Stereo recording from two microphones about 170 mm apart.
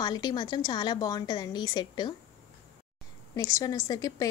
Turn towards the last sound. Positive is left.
turn(degrees=20)  # may be behind; listen again after turning